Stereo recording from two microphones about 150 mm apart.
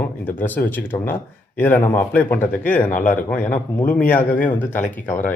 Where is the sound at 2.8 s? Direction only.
60° left (ahead or behind).